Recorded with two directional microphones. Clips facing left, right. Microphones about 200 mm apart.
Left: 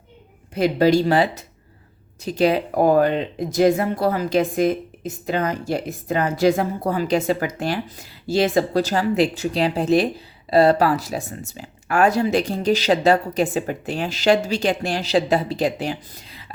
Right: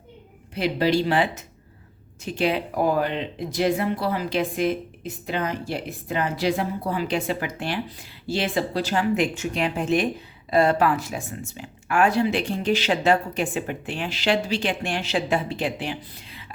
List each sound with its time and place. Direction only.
0.5 s speech: 45° left (ahead or behind)